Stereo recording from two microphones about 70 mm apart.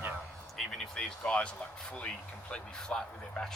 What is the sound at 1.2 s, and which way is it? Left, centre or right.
Speech, centre.